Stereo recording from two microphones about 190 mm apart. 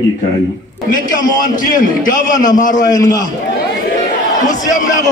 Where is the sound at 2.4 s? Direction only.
20° left (ahead or behind).